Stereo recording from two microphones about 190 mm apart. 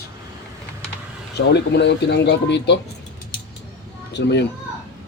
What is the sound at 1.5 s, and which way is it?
Speech, 65° left (ahead or behind).